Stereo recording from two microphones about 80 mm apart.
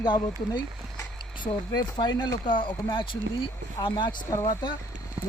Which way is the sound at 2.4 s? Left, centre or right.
Left.